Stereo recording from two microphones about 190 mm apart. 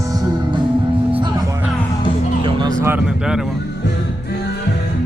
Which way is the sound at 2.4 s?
25° right (ahead or behind).